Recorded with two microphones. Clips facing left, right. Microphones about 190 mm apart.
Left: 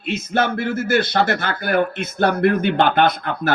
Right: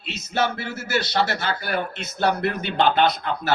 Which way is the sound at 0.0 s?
55° left (ahead or behind).